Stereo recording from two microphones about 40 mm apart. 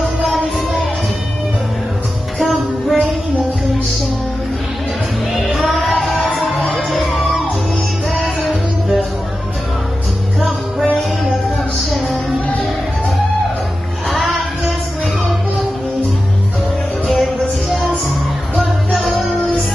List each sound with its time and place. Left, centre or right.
2.3 s music: centre
5.3 s music: centre
12.1 s music: left
17.1 s music: centre